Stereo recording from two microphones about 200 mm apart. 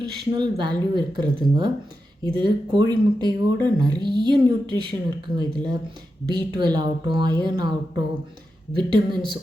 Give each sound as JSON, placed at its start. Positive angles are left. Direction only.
{"t": 0.0, "sound": "speech", "side_deg": -25}